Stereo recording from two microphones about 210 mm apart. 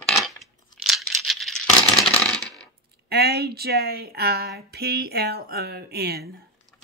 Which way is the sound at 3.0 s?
50° right (ahead or behind).